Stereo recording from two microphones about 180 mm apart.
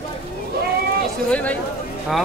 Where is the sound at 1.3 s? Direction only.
10° left (ahead or behind).